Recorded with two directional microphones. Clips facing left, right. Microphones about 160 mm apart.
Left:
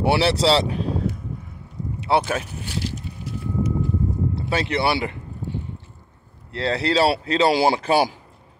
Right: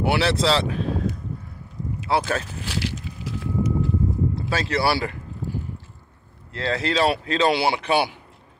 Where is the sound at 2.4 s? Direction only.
90° right.